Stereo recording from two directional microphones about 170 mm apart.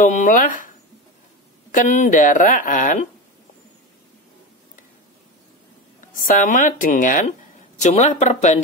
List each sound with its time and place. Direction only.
0.0 s a woman's voice: 50° left (ahead or behind)
6.1 s a woman's voice: 50° left (ahead or behind)